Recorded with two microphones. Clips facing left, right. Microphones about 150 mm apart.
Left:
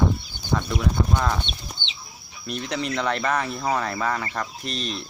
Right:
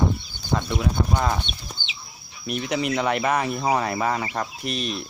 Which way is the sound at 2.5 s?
10° right (ahead or behind).